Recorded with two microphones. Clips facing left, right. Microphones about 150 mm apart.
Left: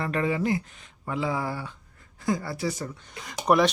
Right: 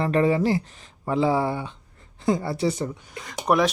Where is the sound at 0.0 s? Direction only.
35° right (ahead or behind).